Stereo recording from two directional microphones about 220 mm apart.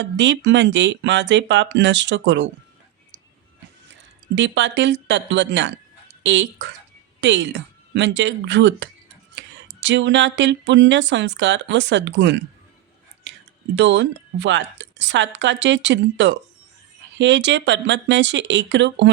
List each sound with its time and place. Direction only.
0.0 s speech: 55° right (ahead or behind)
4.4 s a woman's voice: 55° right (ahead or behind)
13.7 s speech: 55° right (ahead or behind)